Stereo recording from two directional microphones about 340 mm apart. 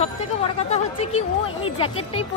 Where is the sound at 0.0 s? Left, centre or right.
Centre.